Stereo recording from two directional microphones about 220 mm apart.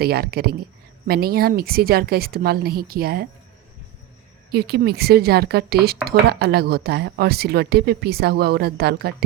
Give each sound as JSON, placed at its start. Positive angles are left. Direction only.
{"t": 0.0, "sound": "speech", "side_deg": -45}
{"t": 4.5, "sound": "speech", "side_deg": -45}